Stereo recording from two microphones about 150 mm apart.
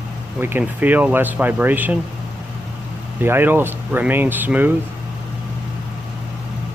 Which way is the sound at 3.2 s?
15° right (ahead or behind).